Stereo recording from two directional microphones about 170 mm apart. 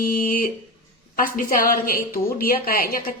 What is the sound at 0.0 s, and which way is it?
A woman's voice, 55° left (ahead or behind).